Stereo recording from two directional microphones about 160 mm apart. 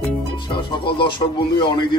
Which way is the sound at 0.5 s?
30° left (ahead or behind).